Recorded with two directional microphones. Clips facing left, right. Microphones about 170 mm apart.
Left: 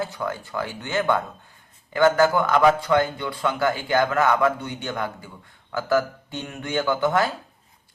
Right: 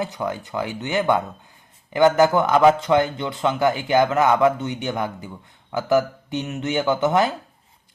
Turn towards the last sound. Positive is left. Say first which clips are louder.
# right 2 dB
turn(degrees=-20)  # may be behind; listen again after turning